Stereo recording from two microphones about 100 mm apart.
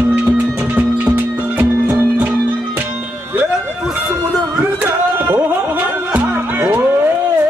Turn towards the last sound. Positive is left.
turn(degrees=-20)  # may be behind; listen again after turning